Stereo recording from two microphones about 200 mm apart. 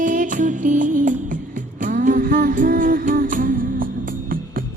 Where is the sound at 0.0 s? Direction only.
40° right (ahead or behind).